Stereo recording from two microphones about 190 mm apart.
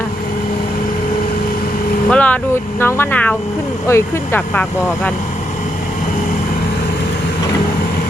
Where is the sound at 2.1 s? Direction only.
5° left (ahead or behind).